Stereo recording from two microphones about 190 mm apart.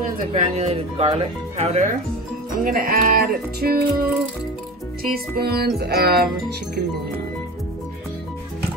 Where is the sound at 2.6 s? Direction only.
50° right (ahead or behind).